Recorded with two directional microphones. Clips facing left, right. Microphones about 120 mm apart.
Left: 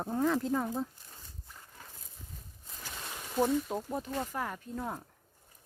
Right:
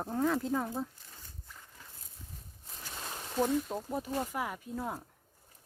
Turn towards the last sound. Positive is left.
turn(degrees=-5)  # may be behind; listen again after turning